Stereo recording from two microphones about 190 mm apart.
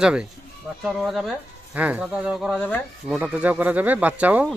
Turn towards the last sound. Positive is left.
turn(degrees=-10)  # may be behind; listen again after turning